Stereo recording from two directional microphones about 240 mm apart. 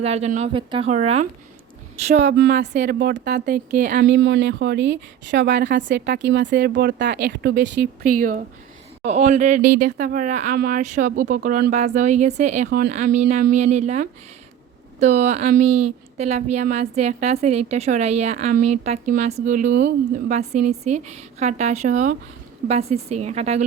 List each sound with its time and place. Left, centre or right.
0.0 s a woman's voice: right
2.5 s a woman's voice: right
9.6 s speech: right
9.8 s a woman's voice: right